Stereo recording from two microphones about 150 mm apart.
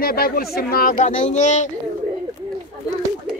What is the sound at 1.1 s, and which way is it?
Speech, 50° left (ahead or behind).